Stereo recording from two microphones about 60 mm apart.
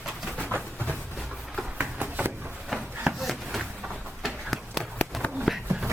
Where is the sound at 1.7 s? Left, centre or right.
Right.